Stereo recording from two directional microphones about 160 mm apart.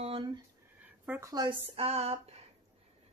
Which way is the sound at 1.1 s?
20° right (ahead or behind).